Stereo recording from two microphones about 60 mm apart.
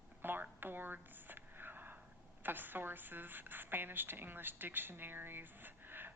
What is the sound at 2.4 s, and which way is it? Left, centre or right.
A woman's voice, right.